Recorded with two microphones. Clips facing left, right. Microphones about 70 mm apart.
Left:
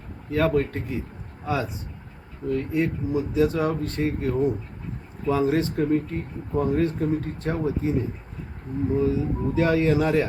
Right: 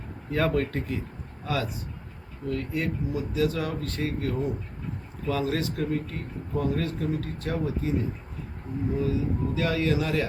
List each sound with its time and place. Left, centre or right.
0.3 s speech: centre
1.5 s speech: left
9.0 s speech: left